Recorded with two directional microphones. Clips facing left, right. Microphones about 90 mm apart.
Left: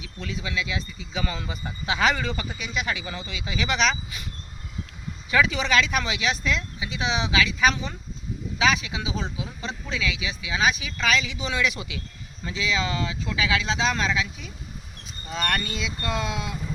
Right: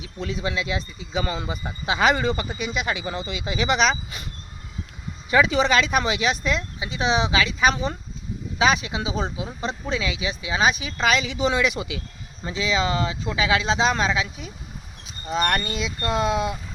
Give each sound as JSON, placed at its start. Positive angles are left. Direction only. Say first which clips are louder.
{"t": 0.0, "sound": "speech", "louder": "right 5 dB", "side_deg": -35}
{"t": 5.3, "sound": "speech", "louder": "right 3 dB", "side_deg": -25}
{"t": 16.2, "sound": "speech", "louder": "right 8 dB", "side_deg": -35}